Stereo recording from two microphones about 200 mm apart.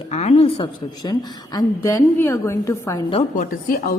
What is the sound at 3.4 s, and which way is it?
Speech, 45° left (ahead or behind).